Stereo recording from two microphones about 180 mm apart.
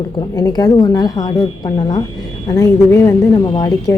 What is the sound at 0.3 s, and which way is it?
A woman's voice, 20° left (ahead or behind).